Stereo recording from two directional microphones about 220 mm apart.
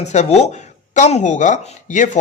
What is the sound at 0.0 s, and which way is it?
Speech, 30° left (ahead or behind).